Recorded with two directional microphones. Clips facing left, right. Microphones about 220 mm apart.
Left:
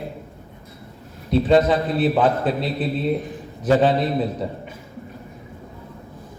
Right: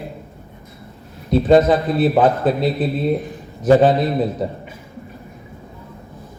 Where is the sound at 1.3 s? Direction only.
45° right (ahead or behind).